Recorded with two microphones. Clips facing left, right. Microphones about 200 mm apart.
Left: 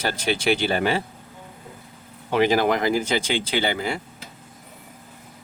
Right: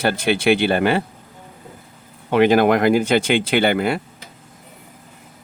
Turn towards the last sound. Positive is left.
turn(degrees=-60)  # may be behind; listen again after turning